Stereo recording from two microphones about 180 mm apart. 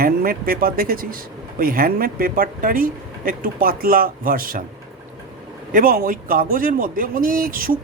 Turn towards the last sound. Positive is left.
turn(degrees=-50)  # may be behind; listen again after turning